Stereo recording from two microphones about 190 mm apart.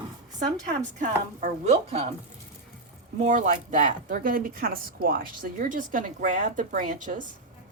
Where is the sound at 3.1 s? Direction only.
40° right (ahead or behind).